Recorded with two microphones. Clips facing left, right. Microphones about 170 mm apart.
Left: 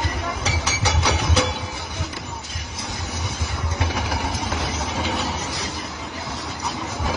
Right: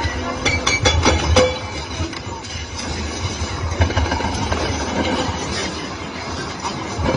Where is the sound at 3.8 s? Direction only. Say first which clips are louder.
Right 5 dB; 65° right (ahead or behind).